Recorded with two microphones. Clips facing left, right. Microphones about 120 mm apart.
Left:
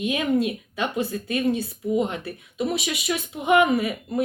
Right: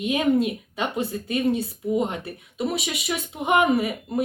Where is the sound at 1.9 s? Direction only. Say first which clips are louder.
Left 1 dB; 45° right (ahead or behind).